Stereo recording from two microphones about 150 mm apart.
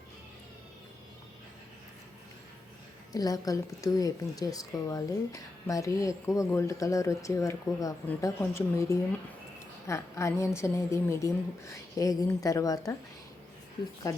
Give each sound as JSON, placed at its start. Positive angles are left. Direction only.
{"t": 3.1, "sound": "a woman's voice", "side_deg": 25}